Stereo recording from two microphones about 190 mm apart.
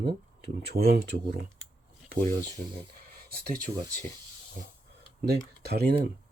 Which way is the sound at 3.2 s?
50° right (ahead or behind).